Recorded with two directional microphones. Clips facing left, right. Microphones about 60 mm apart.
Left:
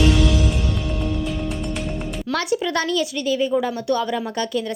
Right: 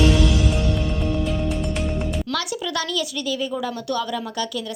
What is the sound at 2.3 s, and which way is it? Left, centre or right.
A woman's voice, left.